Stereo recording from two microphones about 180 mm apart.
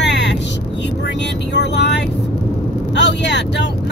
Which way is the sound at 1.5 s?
75° left (ahead or behind).